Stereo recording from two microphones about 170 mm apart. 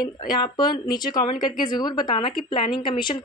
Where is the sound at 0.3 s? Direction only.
25° left (ahead or behind).